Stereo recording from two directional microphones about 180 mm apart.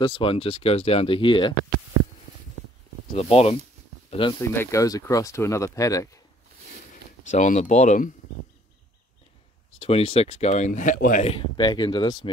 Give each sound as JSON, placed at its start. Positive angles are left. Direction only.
{"t": 0.0, "sound": "speech", "side_deg": 25}
{"t": 3.1, "sound": "speech", "side_deg": 35}
{"t": 4.4, "sound": "speech", "side_deg": 15}
{"t": 7.2, "sound": "speech", "side_deg": 45}
{"t": 9.8, "sound": "speech", "side_deg": 30}